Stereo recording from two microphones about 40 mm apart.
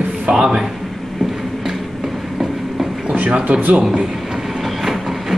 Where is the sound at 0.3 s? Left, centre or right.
Centre.